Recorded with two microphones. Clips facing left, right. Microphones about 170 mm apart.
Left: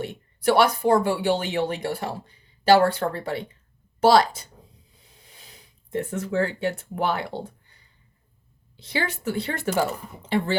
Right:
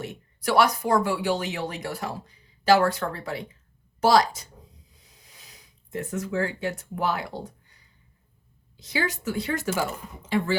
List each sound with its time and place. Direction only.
0.0 s speech: 30° left (ahead or behind)
5.0 s a sound: 30° left (ahead or behind)
8.7 s a woman's voice: 30° left (ahead or behind)